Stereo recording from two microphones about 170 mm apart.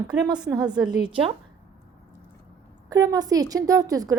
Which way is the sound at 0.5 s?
25° right (ahead or behind).